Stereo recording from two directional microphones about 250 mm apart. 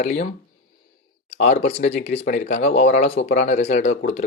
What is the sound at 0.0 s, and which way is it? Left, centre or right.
Speech, left.